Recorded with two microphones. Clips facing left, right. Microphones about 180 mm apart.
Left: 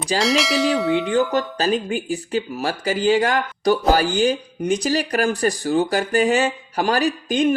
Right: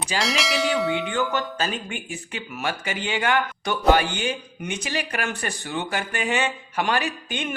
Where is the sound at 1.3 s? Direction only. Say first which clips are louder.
Left 6 dB; 35° left (ahead or behind).